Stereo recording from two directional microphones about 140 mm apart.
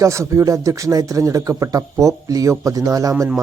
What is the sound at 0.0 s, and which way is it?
Speech, 20° right (ahead or behind).